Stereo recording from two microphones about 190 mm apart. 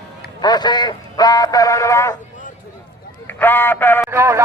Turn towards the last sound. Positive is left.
turn(degrees=-15)  # may be behind; listen again after turning